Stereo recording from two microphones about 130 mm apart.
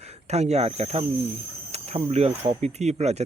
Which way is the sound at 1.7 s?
55° right (ahead or behind).